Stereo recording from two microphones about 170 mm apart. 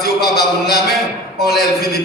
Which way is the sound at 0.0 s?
65° left (ahead or behind).